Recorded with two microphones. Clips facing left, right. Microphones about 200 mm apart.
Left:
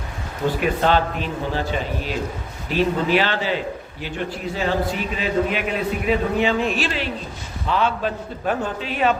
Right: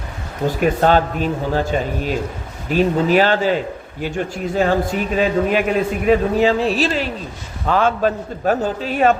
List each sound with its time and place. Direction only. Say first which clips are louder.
0.6 s a man's voice: right 5 dB; 45° right (ahead or behind)